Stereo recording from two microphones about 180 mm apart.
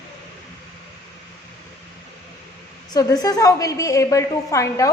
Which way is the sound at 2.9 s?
20° left (ahead or behind).